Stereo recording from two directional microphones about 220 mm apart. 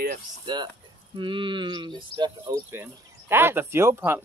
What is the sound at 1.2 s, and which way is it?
Speech, 20° right (ahead or behind).